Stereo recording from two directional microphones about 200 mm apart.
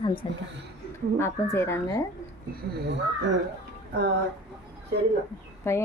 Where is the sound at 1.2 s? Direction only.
15° left (ahead or behind).